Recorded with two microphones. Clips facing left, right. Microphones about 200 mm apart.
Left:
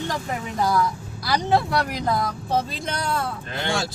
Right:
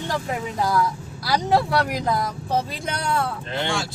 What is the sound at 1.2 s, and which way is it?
Speech, 5° right (ahead or behind).